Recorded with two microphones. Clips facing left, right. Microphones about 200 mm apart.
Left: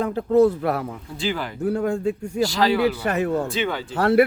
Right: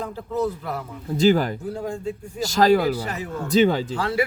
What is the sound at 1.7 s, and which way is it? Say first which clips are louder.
Speech: left 6 dB; 70° left (ahead or behind).